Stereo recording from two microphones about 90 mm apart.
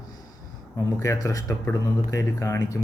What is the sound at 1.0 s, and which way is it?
Speech, 35° left (ahead or behind).